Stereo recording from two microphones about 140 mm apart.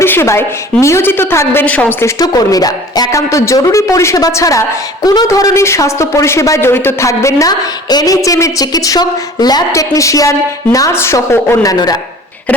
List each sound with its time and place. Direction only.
0.0 s speech: 15° left (ahead or behind)